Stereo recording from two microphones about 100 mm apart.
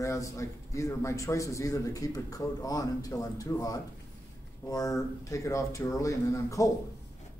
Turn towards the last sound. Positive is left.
turn(degrees=35)  # may be behind; listen again after turning